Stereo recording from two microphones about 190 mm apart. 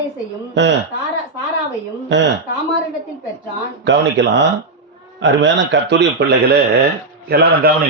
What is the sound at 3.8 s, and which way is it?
Speech, 65° right (ahead or behind).